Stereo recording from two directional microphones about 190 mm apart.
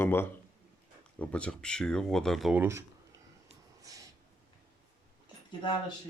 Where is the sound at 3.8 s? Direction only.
15° right (ahead or behind).